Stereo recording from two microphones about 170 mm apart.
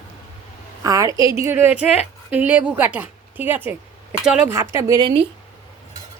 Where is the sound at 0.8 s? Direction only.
20° right (ahead or behind).